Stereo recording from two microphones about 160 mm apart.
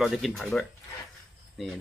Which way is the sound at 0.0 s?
Centre (ahead or behind).